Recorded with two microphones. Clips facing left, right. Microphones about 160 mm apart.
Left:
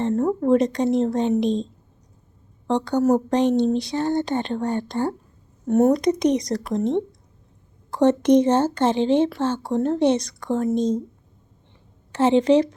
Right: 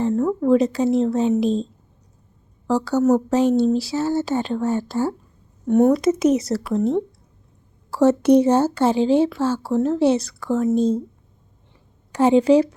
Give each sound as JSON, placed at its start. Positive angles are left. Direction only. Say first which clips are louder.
{"t": 0.2, "sound": "a woman's voice", "louder": "right 1 dB", "side_deg": 30}
{"t": 0.5, "sound": "speech", "louder": "right 2 dB", "side_deg": -5}
{"t": 2.6, "sound": "speech", "louder": "right 2 dB", "side_deg": -5}
{"t": 7.9, "sound": "speech", "louder": "right 2 dB", "side_deg": -5}
{"t": 12.1, "sound": "speech", "louder": "right 2 dB", "side_deg": -10}